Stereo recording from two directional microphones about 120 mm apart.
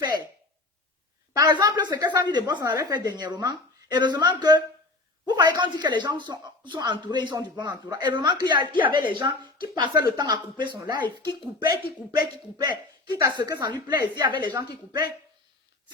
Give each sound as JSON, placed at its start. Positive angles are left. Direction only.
{"t": 1.3, "sound": "speech", "side_deg": -35}
{"t": 12.1, "sound": "speech", "side_deg": -35}